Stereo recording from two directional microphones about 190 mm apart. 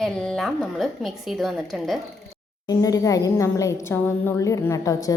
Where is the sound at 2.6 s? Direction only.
20° left (ahead or behind).